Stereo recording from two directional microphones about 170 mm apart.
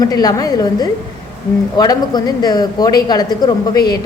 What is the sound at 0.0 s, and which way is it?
Speech, 20° left (ahead or behind).